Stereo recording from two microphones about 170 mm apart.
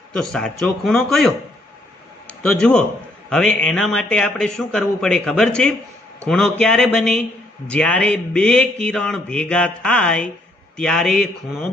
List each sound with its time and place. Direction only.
0.1 s a man's voice: 5° left (ahead or behind)